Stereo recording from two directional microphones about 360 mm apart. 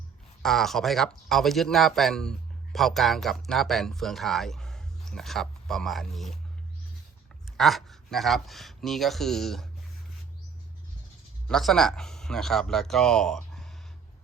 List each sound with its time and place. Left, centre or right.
0.4 s speech: centre
7.5 s speech: centre
11.4 s speech: centre